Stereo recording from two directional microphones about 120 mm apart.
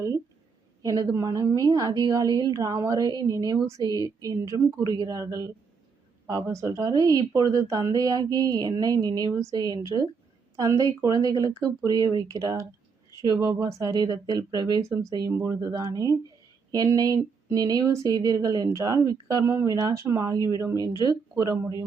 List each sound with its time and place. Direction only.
0.8 s a woman's voice: 30° right (ahead or behind)
6.2 s a woman's voice: 25° right (ahead or behind)